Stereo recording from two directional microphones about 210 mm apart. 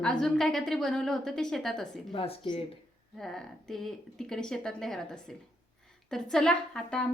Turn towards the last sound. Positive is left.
turn(degrees=5)  # may be behind; listen again after turning